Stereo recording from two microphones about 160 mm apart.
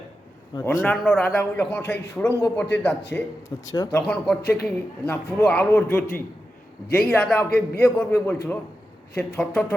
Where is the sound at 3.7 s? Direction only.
25° left (ahead or behind).